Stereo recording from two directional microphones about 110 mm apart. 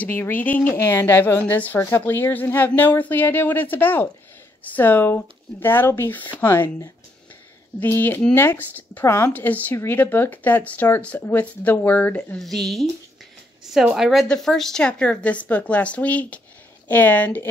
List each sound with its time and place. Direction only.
0.0 s speech: 20° left (ahead or behind)
7.8 s speech: 20° left (ahead or behind)
12.4 s speech: 5° left (ahead or behind)
14.2 s speech: 5° left (ahead or behind)